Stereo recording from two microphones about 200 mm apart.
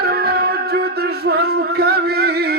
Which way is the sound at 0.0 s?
50° right (ahead or behind).